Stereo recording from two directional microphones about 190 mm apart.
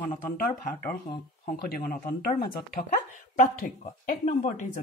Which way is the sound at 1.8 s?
50° left (ahead or behind).